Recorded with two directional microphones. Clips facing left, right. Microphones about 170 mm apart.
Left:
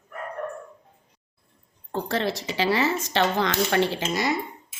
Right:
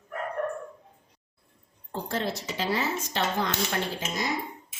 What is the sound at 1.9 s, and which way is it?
Speech, 80° left.